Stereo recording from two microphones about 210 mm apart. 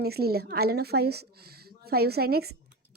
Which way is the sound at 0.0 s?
50° right (ahead or behind).